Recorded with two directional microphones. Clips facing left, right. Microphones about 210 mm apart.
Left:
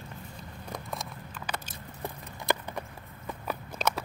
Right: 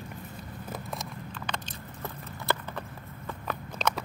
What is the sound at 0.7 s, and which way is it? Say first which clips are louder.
Keys jangling: even; centre (ahead or behind).